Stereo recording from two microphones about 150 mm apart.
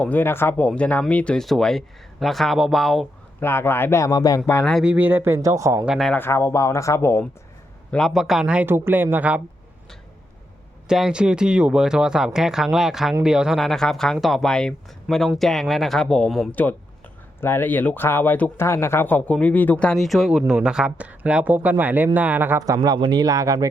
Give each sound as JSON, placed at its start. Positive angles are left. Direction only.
{"t": 0.0, "sound": "speech", "side_deg": 10}
{"t": 3.4, "sound": "speech", "side_deg": 15}
{"t": 4.6, "sound": "speech", "side_deg": 0}
{"t": 5.8, "sound": "speech", "side_deg": 0}
{"t": 6.1, "sound": "speech", "side_deg": 15}
{"t": 7.9, "sound": "speech", "side_deg": 5}
{"t": 10.8, "sound": "speech", "side_deg": -5}